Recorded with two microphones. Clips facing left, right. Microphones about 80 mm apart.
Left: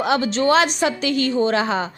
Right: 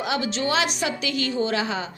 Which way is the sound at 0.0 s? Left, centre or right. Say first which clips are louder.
Left 7 dB; left.